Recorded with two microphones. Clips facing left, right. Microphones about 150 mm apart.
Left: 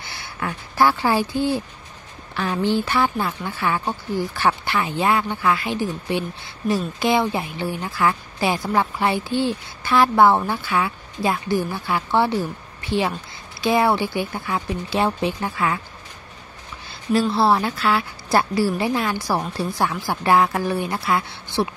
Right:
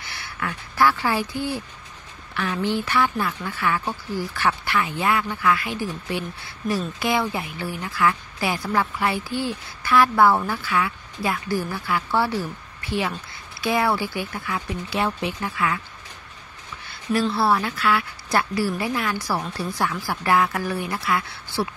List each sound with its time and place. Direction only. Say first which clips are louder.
0.0 s a woman's voice: left 2 dB; 30° left (ahead or behind)
13.6 s a woman's voice: left 4 dB; 25° left (ahead or behind)
17.3 s a woman's voice: left 3 dB; 30° left (ahead or behind)